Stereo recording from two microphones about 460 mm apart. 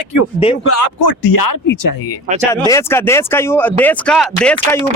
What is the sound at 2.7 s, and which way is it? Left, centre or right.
A man's voice, centre.